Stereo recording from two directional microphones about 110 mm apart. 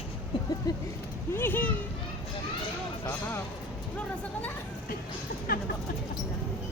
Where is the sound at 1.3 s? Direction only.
20° left (ahead or behind).